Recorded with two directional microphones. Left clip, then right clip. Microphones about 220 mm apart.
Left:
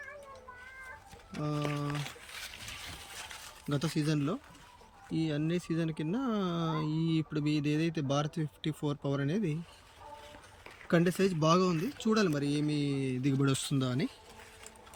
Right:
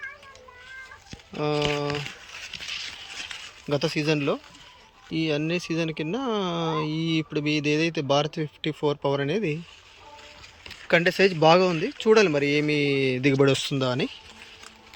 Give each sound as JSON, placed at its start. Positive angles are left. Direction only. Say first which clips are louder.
{"t": 1.4, "sound": "speech", "louder": "right 11 dB", "side_deg": 5}
{"t": 3.8, "sound": "speech", "louder": "right 9 dB", "side_deg": 5}
{"t": 11.1, "sound": "speech", "louder": "right 14 dB", "side_deg": 5}
{"t": 12.3, "sound": "speech", "louder": "right 10 dB", "side_deg": -20}
{"t": 12.5, "sound": "speech", "louder": "right 10 dB", "side_deg": 5}
{"t": 12.8, "sound": "speech", "louder": "right 11 dB", "side_deg": -25}
{"t": 13.3, "sound": "speech", "louder": "right 11 dB", "side_deg": 10}